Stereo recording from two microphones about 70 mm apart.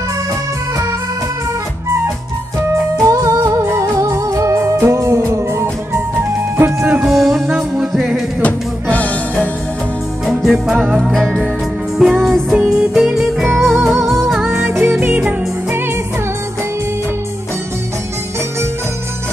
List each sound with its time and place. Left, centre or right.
3.1 s music: right
6.6 s music: right
7.0 s music: centre
8.4 s music: left
10.4 s music: centre
12.6 s music: centre
14.7 s music: right